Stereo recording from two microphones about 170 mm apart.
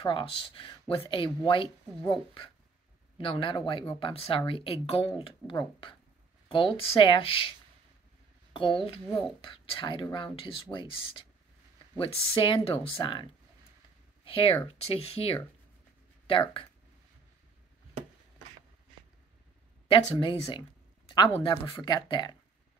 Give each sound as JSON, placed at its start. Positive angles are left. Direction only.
{"t": 0.0, "sound": "speech", "side_deg": 30}
{"t": 3.2, "sound": "speech", "side_deg": 30}
{"t": 8.5, "sound": "speech", "side_deg": 30}
{"t": 19.9, "sound": "speech", "side_deg": 30}